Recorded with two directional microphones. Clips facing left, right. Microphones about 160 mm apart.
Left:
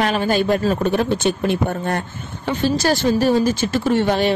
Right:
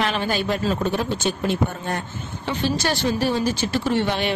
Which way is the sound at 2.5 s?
45° left (ahead or behind).